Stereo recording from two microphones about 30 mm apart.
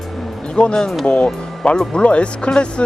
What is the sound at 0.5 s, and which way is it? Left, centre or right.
Speech, left.